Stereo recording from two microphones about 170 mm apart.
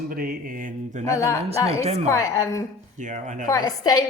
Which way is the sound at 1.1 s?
20° left (ahead or behind).